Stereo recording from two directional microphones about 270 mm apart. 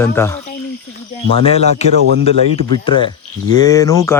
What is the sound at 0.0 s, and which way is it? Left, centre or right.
Speech, centre.